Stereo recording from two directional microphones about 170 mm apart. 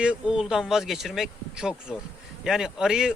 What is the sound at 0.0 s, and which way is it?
A man's voice, 5° right (ahead or behind).